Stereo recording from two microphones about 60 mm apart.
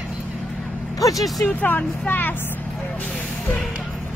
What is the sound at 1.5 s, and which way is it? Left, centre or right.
Speech, left.